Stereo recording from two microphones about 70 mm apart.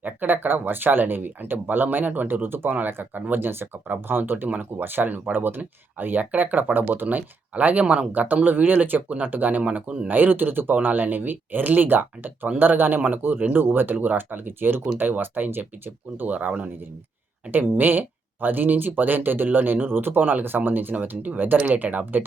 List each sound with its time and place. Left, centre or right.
0.0 s speech: right
17.5 s speech: right